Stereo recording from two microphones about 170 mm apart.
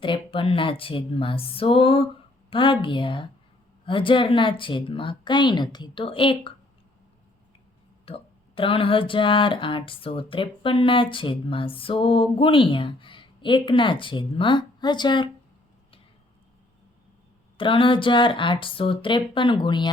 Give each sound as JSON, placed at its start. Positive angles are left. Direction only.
{"t": 0.0, "sound": "speech", "side_deg": 30}
{"t": 8.0, "sound": "speech", "side_deg": 30}
{"t": 17.6, "sound": "speech", "side_deg": 30}